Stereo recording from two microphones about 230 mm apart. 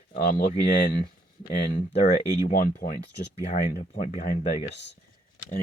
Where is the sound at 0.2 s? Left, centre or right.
Left.